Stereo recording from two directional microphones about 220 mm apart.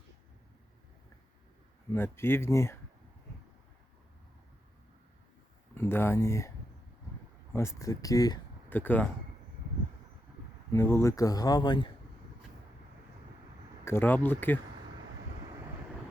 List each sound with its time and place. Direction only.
1.9 s speech: 10° left (ahead or behind)
5.7 s speech: 10° left (ahead or behind)
7.5 s speech: 10° left (ahead or behind)
10.7 s speech: 10° left (ahead or behind)
13.8 s speech: 10° left (ahead or behind)